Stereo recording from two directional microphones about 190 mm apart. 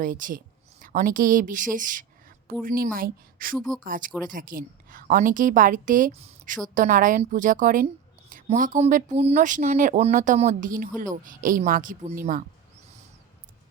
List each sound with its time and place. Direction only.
0.0 s a woman's voice: 45° right (ahead or behind)